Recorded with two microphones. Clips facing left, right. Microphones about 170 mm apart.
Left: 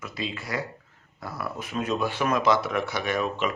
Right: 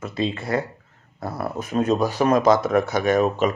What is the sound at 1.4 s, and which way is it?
A man's voice, 40° right (ahead or behind).